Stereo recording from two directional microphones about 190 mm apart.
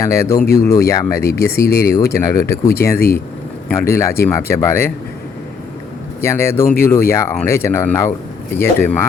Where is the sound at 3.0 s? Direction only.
50° left (ahead or behind).